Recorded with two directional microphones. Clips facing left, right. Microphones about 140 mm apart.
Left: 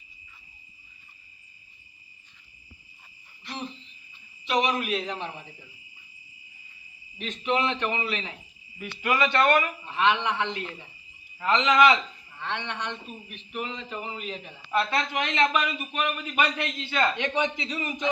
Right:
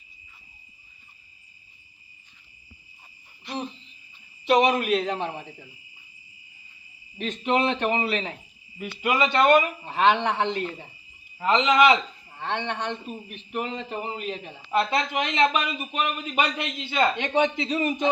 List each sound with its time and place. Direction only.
4.4 s a man's voice: 55° right (ahead or behind)
7.2 s a man's voice: 45° right (ahead or behind)
8.8 s a man's voice: 20° right (ahead or behind)
9.8 s a man's voice: 40° right (ahead or behind); by 11.9 s 25° right (ahead or behind)
12.3 s a man's voice: 50° right (ahead or behind); by 17.7 s 30° right (ahead or behind)